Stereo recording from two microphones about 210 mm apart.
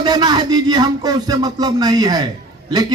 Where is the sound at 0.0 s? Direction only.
20° right (ahead or behind).